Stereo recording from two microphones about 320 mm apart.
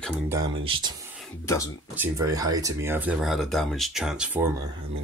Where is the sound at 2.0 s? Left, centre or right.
Centre.